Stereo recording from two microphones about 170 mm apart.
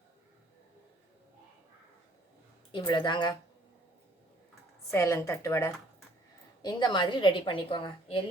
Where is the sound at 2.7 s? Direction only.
25° left (ahead or behind).